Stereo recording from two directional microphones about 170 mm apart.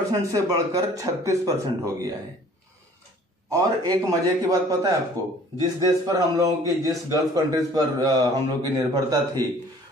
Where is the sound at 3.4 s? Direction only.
20° right (ahead or behind).